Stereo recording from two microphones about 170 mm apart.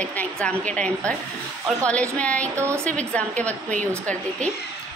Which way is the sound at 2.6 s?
15° right (ahead or behind).